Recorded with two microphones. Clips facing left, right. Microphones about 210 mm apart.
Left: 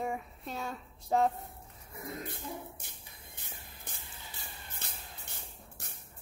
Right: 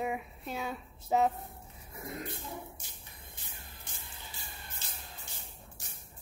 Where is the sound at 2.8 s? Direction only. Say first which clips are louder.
Even; 55° left (ahead or behind).